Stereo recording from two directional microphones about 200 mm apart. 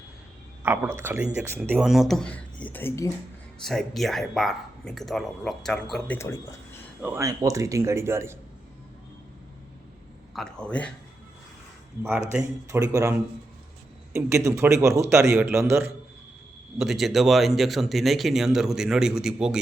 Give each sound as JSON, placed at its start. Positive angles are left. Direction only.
{"t": 0.6, "sound": "speech", "side_deg": -10}
{"t": 3.6, "sound": "speech", "side_deg": 0}
{"t": 7.0, "sound": "speech", "side_deg": -15}
{"t": 10.3, "sound": "speech", "side_deg": 5}
{"t": 12.0, "sound": "speech", "side_deg": -5}
{"t": 16.7, "sound": "speech", "side_deg": 0}